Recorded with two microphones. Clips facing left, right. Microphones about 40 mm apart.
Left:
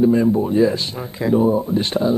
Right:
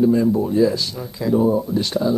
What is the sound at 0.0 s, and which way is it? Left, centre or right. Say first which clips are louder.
A man's voice: left 1 dB; left.